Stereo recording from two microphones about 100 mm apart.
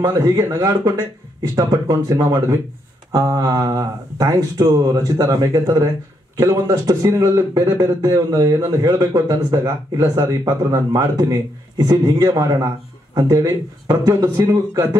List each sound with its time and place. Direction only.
0.0 s a man's voice: 35° right (ahead or behind)